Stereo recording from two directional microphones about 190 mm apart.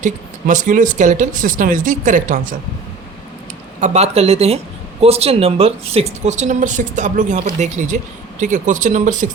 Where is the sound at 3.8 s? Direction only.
35° right (ahead or behind).